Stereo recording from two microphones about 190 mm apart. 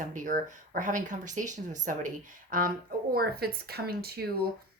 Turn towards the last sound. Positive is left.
turn(degrees=-55)  # may be behind; listen again after turning